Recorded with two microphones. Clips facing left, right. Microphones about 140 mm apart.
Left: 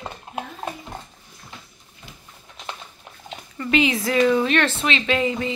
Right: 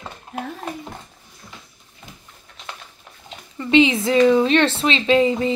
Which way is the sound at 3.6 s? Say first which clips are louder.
Right 5 dB; 25° right (ahead or behind).